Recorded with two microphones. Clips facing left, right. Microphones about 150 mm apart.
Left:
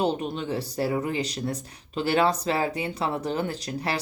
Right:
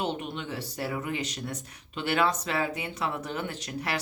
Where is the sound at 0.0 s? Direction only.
35° left (ahead or behind).